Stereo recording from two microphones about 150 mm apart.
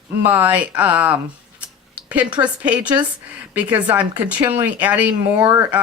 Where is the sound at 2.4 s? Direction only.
35° right (ahead or behind).